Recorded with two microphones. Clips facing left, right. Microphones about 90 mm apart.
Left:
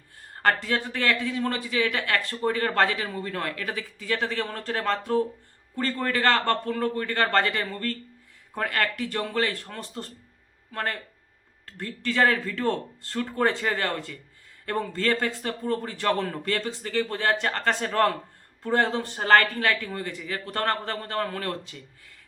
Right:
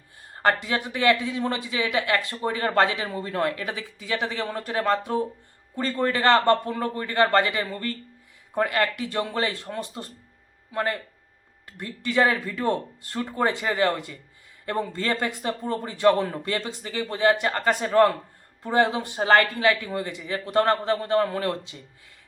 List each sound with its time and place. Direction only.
0.4 s speech: 15° right (ahead or behind)